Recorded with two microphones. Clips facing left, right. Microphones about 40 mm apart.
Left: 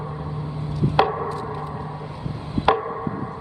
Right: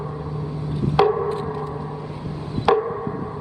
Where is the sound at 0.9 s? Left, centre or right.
Centre.